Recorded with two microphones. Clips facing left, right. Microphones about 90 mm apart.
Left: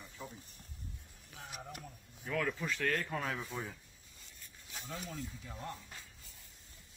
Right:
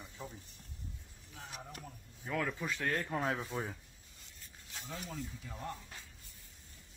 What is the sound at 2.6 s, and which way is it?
Speech, 20° right (ahead or behind).